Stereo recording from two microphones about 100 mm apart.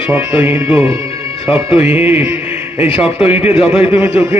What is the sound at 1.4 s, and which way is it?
Speech, 70° left (ahead or behind).